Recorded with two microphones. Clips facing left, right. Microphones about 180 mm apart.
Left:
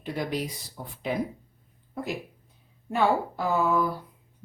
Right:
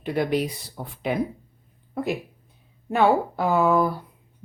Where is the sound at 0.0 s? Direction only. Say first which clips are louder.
Right 7 dB; 65° right (ahead or behind).